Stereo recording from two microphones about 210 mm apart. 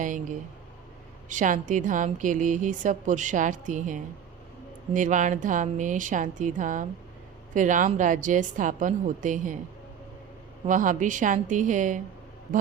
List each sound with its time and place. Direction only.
1.3 s a woman's voice: 35° right (ahead or behind)
10.7 s a woman's voice: 40° right (ahead or behind)